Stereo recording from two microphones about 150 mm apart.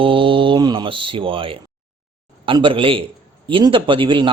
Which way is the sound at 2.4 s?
35° right (ahead or behind).